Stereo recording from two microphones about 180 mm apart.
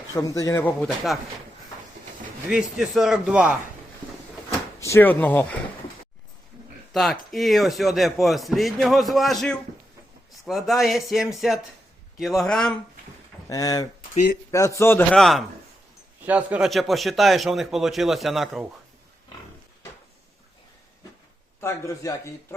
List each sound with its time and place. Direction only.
0.2 s a man's voice: 20° left (ahead or behind); by 1.2 s centre (ahead or behind)
2.5 s speech: 5° right (ahead or behind)
4.8 s a man's voice: 15° left (ahead or behind)
6.9 s speech: centre (ahead or behind)
13.5 s a man's voice: 20° left (ahead or behind); by 18.6 s centre (ahead or behind)
21.6 s a man's voice: 15° left (ahead or behind)